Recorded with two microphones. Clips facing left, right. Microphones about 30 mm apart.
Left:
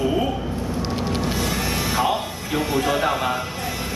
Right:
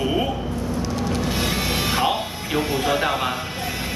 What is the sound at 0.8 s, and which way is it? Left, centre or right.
Vehicle, left.